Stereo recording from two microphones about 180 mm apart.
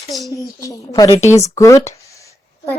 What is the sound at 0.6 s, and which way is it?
Speech, 20° left (ahead or behind).